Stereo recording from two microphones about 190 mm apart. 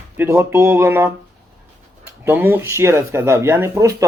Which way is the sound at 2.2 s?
10° right (ahead or behind).